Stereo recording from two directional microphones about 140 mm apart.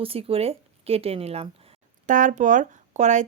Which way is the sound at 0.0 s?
45° right (ahead or behind).